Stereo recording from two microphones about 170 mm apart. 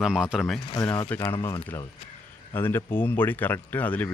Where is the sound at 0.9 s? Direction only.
10° left (ahead or behind).